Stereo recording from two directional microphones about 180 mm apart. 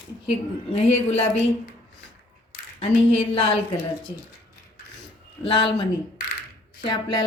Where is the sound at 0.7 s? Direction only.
35° left (ahead or behind).